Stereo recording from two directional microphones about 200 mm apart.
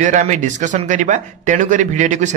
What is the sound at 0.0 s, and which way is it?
Speech, 40° right (ahead or behind).